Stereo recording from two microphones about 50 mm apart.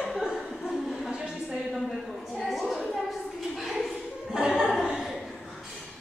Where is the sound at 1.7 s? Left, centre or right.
Centre.